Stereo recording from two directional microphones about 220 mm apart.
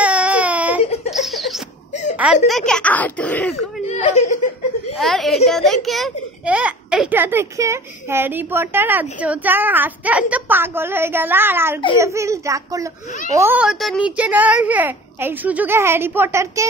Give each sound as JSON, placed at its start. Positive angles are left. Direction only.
{"t": 0.0, "sound": "baby cry", "side_deg": -5}
{"t": 0.8, "sound": "giggle", "side_deg": 30}
{"t": 1.1, "sound": "a sound", "side_deg": 0}
{"t": 2.4, "sound": "speech", "side_deg": 0}
{"t": 3.8, "sound": "speech", "side_deg": 30}
{"t": 4.9, "sound": "a child's voice", "side_deg": 0}